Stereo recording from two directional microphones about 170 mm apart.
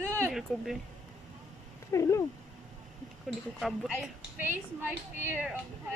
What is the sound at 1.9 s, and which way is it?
Cat, 15° left (ahead or behind).